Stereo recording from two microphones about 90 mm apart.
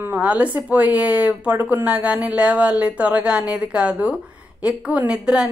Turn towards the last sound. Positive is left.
turn(degrees=-10)  # may be behind; listen again after turning